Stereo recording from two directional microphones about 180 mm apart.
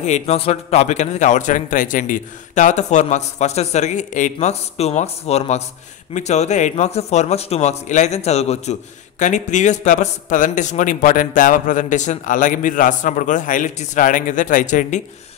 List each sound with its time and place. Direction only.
0.0 s a man's voice: 40° left (ahead or behind)